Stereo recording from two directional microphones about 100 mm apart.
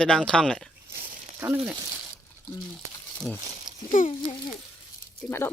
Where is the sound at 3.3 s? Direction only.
15° left (ahead or behind).